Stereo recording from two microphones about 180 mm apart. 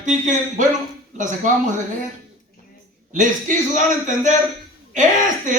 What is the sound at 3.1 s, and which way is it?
Speech, 45° right (ahead or behind).